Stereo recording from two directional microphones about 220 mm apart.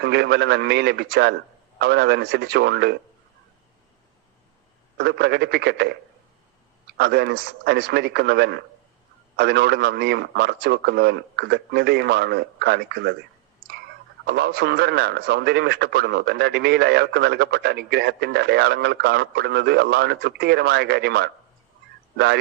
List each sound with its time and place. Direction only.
0.0 s a man's voice: 50° right (ahead or behind)
4.9 s a man's voice: 50° right (ahead or behind)
14.3 s a man's voice: 50° right (ahead or behind)